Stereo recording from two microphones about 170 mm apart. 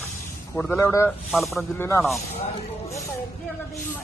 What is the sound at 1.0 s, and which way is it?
Speech, centre (ahead or behind).